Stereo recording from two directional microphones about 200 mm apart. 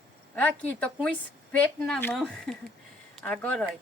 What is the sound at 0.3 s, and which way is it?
A woman's voice, 10° left (ahead or behind).